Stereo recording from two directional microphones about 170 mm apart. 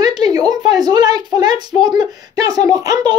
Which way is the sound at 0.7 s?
25° right (ahead or behind).